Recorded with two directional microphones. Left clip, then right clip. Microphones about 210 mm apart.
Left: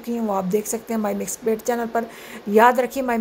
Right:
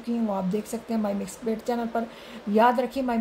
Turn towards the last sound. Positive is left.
turn(degrees=15)  # may be behind; listen again after turning